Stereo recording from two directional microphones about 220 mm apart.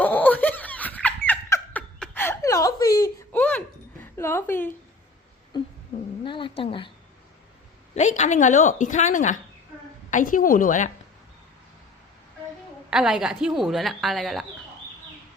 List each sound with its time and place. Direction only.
0.0 s laughter: 5° left (ahead or behind)
4.0 s a sound: 10° left (ahead or behind)
6.2 s a woman's voice: 20° left (ahead or behind)
7.9 s a woman's voice: 30° left (ahead or behind)
12.9 s speech: 5° right (ahead or behind)